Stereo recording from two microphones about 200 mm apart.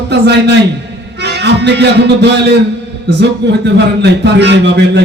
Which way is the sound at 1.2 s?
60° right (ahead or behind).